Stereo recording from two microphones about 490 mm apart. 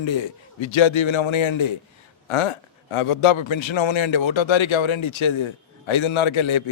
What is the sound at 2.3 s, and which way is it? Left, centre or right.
A man's voice, left.